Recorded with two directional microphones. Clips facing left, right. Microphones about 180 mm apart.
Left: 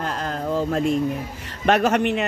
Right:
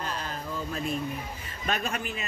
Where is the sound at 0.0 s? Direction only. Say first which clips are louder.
Left 8 dB; 80° left.